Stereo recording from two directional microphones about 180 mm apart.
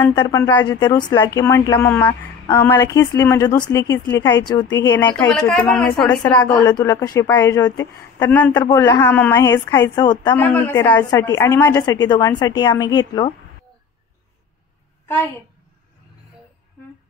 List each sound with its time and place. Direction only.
0.2 s a woman's voice: 15° left (ahead or behind)
4.9 s a woman's voice: 10° left (ahead or behind)
6.6 s a woman's voice: 20° left (ahead or behind)
8.6 s speech: 25° left (ahead or behind)
9.0 s a woman's voice: 10° left (ahead or behind)
10.3 s a woman's voice: 10° left (ahead or behind)